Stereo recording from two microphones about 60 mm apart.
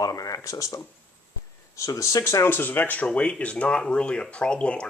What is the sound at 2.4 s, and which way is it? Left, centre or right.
Speech, left.